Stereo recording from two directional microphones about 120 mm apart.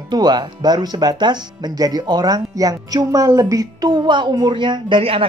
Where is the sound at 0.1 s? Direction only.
35° right (ahead or behind).